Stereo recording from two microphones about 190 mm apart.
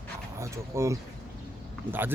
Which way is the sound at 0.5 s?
15° right (ahead or behind).